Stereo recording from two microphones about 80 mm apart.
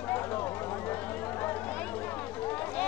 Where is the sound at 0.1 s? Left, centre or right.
Left.